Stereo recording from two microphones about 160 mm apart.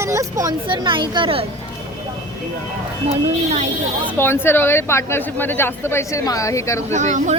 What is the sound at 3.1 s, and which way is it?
Speech, 40° right (ahead or behind).